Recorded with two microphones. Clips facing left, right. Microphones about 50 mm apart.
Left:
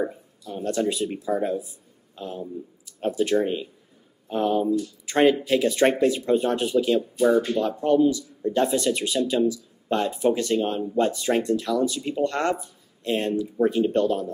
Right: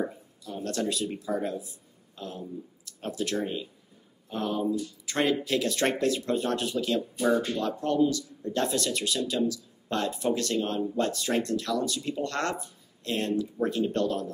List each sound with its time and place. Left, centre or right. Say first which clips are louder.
0.0 s speech: left 4 dB; centre